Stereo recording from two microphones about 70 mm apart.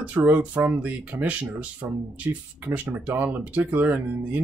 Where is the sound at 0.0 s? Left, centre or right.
Right.